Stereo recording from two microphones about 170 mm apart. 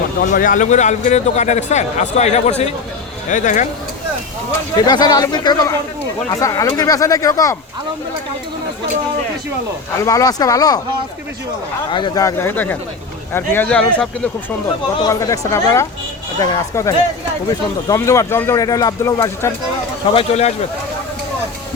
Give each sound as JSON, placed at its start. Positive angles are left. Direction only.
{"t": 0.2, "sound": "speech", "side_deg": 55}
{"t": 4.8, "sound": "speech", "side_deg": 25}
{"t": 10.0, "sound": "speech", "side_deg": 20}
{"t": 11.9, "sound": "speech", "side_deg": 30}
{"t": 15.0, "sound": "speech", "side_deg": 20}
{"t": 20.1, "sound": "speech", "side_deg": 35}